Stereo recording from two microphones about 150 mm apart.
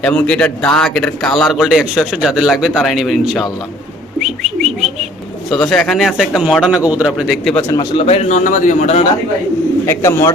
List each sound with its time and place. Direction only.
0.0 s speech: 10° left (ahead or behind)
4.2 s bird: centre (ahead or behind)
5.5 s speech: centre (ahead or behind)
7.9 s a man's voice: 45° left (ahead or behind)
9.8 s speech: 20° left (ahead or behind)